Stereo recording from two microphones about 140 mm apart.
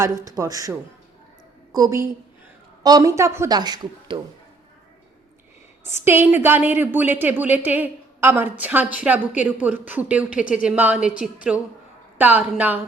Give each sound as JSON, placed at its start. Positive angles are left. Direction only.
{"t": 0.3, "sound": "a woman's voice", "side_deg": -25}
{"t": 5.8, "sound": "a woman's voice", "side_deg": -15}